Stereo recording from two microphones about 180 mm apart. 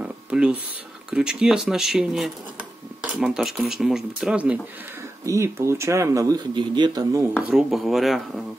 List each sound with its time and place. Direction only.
0.0 s a sound: 5° right (ahead or behind)
1.1 s speech: 5° right (ahead or behind); by 7.2 s 20° right (ahead or behind)
7.4 s speech: centre (ahead or behind)